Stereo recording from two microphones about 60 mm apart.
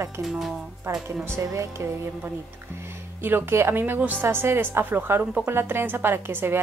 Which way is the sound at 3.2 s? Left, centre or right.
Right.